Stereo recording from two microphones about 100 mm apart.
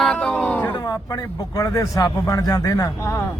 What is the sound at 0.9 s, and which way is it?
A man's voice, 40° left (ahead or behind).